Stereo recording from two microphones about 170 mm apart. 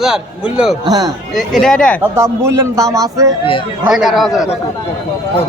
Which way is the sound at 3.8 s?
5° right (ahead or behind).